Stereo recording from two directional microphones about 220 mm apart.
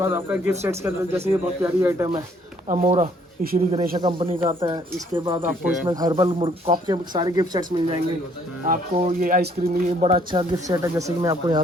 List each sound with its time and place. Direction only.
0.0 s speech: 10° right (ahead or behind)
2.6 s speech: 35° right (ahead or behind)
3.9 s speech: 20° right (ahead or behind)
5.4 s speech: 10° right (ahead or behind)
8.6 s speech: 40° right (ahead or behind); by 11.6 s 15° right (ahead or behind)